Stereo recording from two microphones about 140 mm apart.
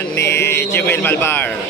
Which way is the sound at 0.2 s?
20° left (ahead or behind).